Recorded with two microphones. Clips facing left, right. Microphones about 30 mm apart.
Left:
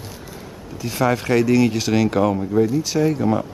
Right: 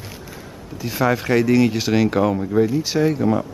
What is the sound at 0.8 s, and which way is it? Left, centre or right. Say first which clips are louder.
Speech: even; centre.